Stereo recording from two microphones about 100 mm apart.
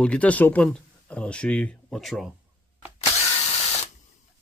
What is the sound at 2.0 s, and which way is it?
Speech, centre (ahead or behind).